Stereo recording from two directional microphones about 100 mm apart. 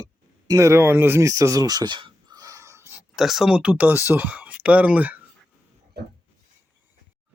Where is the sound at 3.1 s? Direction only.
5° right (ahead or behind).